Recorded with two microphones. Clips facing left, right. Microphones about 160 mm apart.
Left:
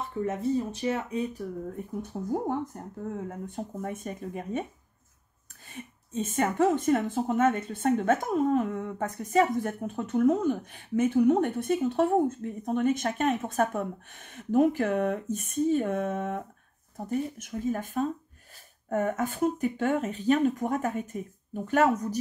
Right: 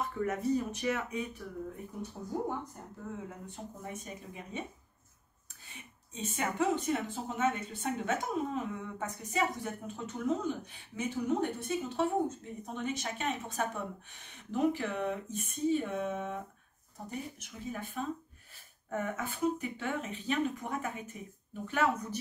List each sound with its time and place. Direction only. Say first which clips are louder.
0.0 s speech: left 3 dB; 25° left (ahead or behind)
2.1 s speech: left 7 dB; 50° left (ahead or behind)
5.8 s speech: left 9 dB; 50° left (ahead or behind)